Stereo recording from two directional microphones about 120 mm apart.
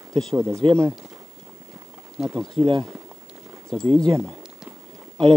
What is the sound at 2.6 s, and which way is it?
Speech, 50° right (ahead or behind).